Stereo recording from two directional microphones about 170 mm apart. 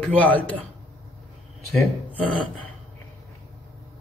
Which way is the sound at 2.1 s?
30° left (ahead or behind).